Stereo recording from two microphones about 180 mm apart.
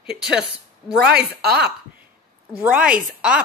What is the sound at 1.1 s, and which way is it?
Speech, 60° right (ahead or behind).